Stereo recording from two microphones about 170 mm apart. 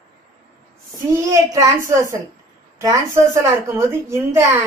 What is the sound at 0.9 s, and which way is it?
A woman's voice, 15° right (ahead or behind).